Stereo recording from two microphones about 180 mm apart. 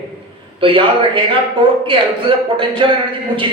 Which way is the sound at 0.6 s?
30° right (ahead or behind).